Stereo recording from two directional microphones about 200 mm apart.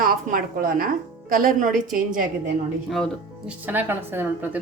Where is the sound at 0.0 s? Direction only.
45° right (ahead or behind).